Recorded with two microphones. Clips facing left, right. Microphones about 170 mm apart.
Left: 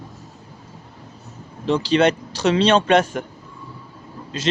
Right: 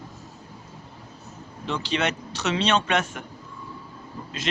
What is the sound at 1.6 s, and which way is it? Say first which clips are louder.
Speech: left 9 dB; 35° left (ahead or behind).